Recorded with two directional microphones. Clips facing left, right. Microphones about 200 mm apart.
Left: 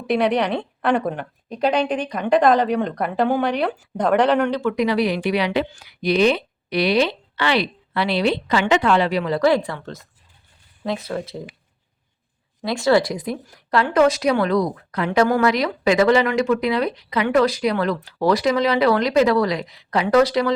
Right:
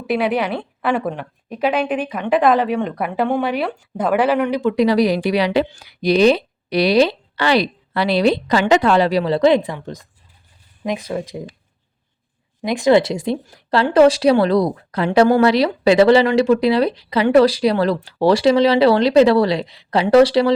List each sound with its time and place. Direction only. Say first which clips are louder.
0.1 s a woman's voice: even; 5° right (ahead or behind)
4.7 s a woman's voice: right 5 dB; 35° right (ahead or behind); by 11.4 s 15° right (ahead or behind)
12.6 s a woman's voice: right 3 dB; 20° right (ahead or behind)